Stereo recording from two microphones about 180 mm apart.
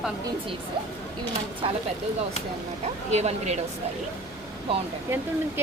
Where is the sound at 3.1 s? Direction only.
40° right (ahead or behind).